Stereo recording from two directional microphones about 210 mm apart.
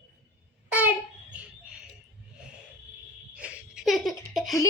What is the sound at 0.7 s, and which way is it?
Babbling, 10° right (ahead or behind).